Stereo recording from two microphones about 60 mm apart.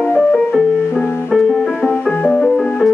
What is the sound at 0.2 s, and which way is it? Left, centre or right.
Music, centre.